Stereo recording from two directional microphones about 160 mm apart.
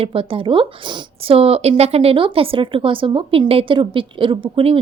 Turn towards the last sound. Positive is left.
turn(degrees=-35)  # may be behind; listen again after turning